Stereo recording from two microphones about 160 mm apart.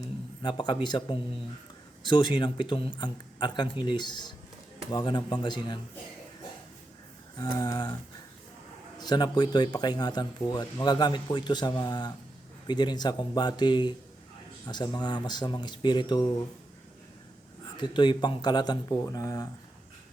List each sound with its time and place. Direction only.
0.4 s speech: 30° left (ahead or behind)
7.3 s speech: 20° left (ahead or behind)
9.0 s speech: 25° left (ahead or behind)
17.7 s speech: 30° left (ahead or behind)